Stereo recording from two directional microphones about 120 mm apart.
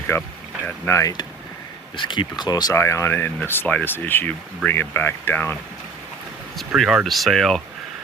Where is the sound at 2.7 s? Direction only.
20° left (ahead or behind).